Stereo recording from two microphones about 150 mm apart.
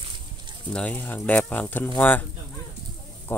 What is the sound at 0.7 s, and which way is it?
Speech, 10° left (ahead or behind).